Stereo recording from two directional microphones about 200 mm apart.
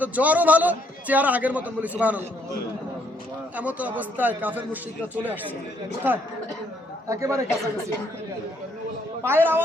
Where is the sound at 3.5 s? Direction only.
5° right (ahead or behind).